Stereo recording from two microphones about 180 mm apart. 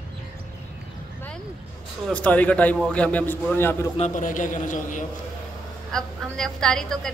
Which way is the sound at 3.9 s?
40° left (ahead or behind).